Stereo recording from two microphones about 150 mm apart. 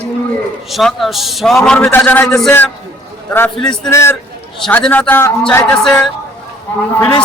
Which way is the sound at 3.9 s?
15° left (ahead or behind).